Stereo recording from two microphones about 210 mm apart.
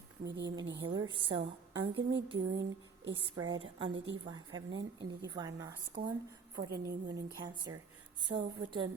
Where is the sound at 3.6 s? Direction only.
25° right (ahead or behind).